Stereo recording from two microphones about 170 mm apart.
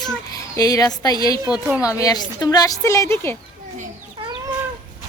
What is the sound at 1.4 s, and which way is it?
Speech, 5° right (ahead or behind).